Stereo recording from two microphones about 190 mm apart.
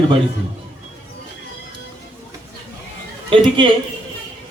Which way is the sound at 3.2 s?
25° right (ahead or behind).